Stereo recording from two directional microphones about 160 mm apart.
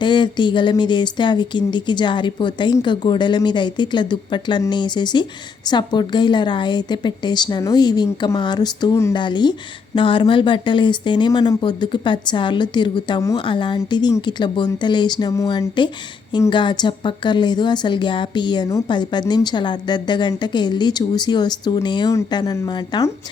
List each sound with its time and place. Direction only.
0.0 s a woman's voice: 30° left (ahead or behind)